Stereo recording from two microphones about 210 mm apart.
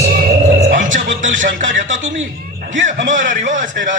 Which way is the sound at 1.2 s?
40° right (ahead or behind).